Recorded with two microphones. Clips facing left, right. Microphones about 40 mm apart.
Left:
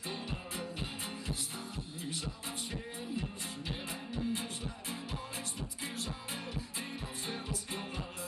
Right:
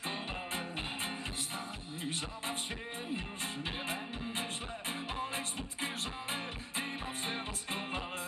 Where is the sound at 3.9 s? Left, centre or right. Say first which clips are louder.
Left 1 dB; right.